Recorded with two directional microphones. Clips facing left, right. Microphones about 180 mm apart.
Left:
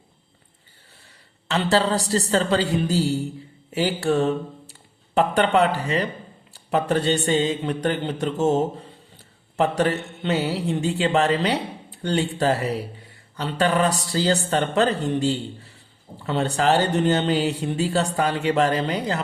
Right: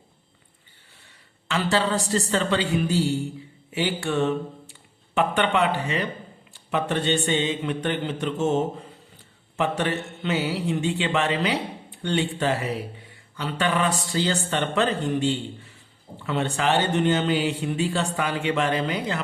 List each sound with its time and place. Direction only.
1.5 s a man's voice: 35° left (ahead or behind)